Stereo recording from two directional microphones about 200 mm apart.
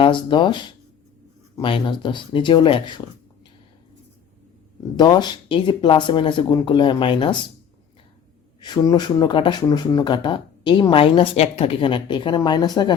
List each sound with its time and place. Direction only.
0.0 s speech: 25° left (ahead or behind)
4.9 s speech: 20° left (ahead or behind)
8.6 s speech: 20° left (ahead or behind)